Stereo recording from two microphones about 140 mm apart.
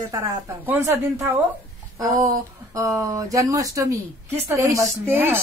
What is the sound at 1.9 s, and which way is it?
A woman's voice, 25° right (ahead or behind).